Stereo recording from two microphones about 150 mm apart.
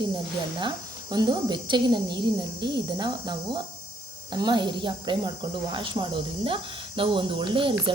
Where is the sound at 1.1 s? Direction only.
30° right (ahead or behind).